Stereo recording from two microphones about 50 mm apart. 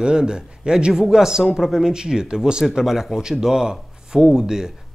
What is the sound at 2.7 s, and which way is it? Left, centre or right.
Speech, centre.